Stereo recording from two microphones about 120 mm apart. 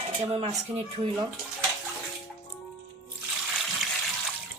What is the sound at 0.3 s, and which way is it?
Speech, 50° right (ahead or behind).